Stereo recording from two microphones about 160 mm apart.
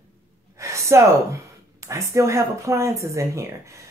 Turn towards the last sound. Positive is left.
turn(degrees=-20)  # may be behind; listen again after turning